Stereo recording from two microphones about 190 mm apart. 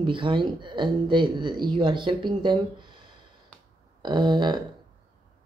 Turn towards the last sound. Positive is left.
turn(degrees=-25)  # may be behind; listen again after turning